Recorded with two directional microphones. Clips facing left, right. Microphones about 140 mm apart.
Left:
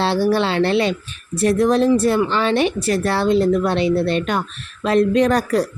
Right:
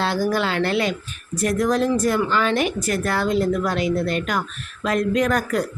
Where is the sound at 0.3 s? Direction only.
25° left (ahead or behind).